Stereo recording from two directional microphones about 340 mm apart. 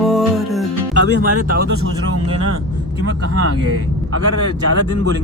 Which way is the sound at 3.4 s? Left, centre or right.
Right.